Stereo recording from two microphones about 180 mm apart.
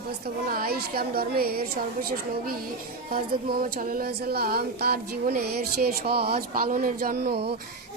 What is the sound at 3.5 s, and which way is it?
Speech, 50° right (ahead or behind).